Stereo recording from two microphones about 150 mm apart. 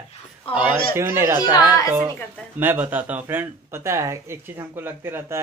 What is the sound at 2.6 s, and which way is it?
Speech, 10° right (ahead or behind).